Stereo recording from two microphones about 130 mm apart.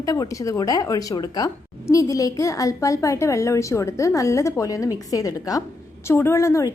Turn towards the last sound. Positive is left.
turn(degrees=25)  # may be behind; listen again after turning